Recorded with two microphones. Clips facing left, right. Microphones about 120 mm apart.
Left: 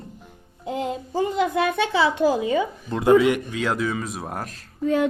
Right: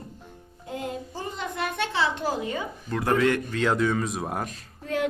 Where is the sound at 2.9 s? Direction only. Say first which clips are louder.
Left 6 dB; 20° left (ahead or behind).